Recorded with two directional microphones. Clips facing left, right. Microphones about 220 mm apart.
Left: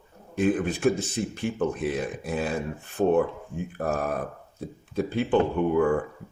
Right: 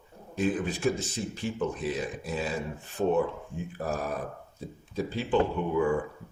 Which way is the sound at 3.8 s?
55° left (ahead or behind).